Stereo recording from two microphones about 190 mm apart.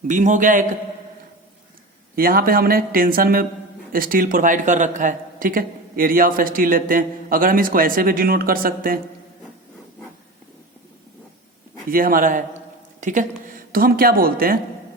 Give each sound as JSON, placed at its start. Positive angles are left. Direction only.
{"t": 0.1, "sound": "a man's voice", "side_deg": -40}
{"t": 2.1, "sound": "a man's voice", "side_deg": -50}
{"t": 11.9, "sound": "a man's voice", "side_deg": -50}